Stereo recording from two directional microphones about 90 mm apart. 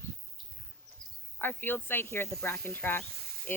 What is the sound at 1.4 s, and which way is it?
Speech, 20° left (ahead or behind).